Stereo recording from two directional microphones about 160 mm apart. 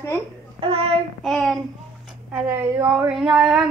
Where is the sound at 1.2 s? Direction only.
Centre (ahead or behind).